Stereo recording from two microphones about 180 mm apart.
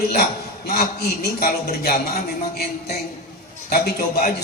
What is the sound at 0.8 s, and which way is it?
A man's voice, 60° left (ahead or behind).